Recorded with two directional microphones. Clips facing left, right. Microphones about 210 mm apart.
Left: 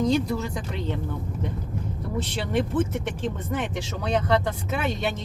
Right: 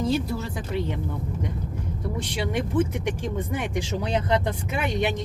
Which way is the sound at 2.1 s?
10° right (ahead or behind).